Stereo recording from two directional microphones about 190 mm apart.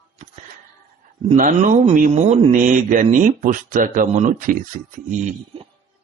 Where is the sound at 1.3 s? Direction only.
45° right (ahead or behind).